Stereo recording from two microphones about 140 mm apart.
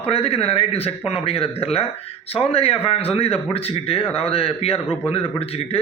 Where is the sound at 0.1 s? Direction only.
45° left (ahead or behind).